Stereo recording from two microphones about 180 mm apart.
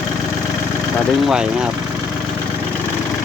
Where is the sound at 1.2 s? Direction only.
5° right (ahead or behind).